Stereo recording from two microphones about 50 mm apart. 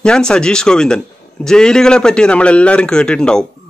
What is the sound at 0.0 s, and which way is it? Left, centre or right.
A man's voice, centre.